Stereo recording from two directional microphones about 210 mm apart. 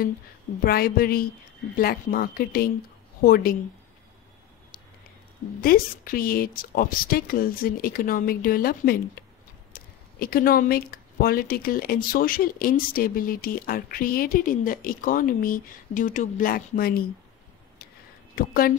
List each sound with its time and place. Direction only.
0.7 s speech: 45° left (ahead or behind)
5.6 s speech: 45° left (ahead or behind)
18.3 s speech: 45° left (ahead or behind)